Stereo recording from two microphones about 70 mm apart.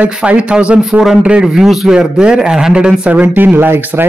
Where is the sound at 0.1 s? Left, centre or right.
Centre.